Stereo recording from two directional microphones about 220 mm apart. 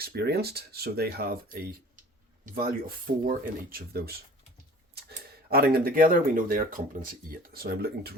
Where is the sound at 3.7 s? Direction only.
45° right (ahead or behind).